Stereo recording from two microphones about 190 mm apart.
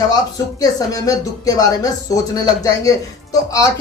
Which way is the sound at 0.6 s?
20° left (ahead or behind).